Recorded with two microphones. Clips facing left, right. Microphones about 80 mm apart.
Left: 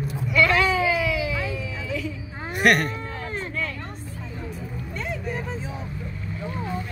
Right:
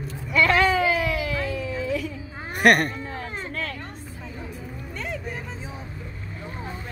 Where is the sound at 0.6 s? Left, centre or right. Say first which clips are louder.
Right 1 dB; right.